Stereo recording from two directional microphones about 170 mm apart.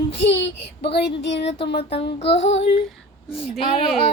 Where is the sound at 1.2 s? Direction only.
90° left.